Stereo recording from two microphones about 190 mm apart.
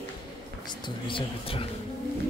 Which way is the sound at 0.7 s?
25° left (ahead or behind).